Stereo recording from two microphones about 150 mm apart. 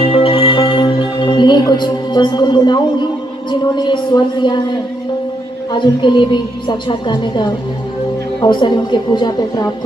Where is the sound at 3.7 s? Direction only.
30° left (ahead or behind).